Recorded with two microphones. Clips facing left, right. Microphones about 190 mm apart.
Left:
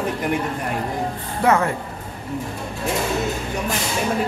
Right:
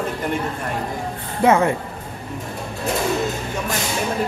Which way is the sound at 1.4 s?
20° right (ahead or behind).